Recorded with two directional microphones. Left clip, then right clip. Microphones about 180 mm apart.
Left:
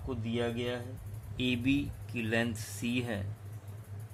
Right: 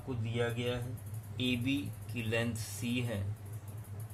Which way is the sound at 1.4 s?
55° left (ahead or behind).